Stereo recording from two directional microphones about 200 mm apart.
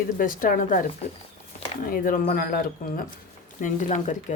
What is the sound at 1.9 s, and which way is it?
Speech, 40° left (ahead or behind).